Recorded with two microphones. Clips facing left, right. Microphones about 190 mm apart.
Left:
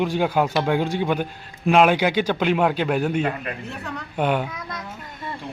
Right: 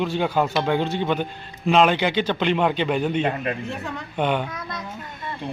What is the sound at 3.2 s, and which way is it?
Speech, 25° right (ahead or behind).